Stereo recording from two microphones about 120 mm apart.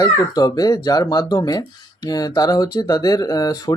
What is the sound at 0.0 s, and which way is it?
Speech, 30° left (ahead or behind).